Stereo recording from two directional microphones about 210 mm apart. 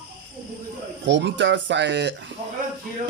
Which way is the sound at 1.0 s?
60° right (ahead or behind).